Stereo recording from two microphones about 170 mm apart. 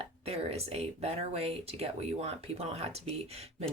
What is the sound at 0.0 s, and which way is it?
Speech, 35° right (ahead or behind).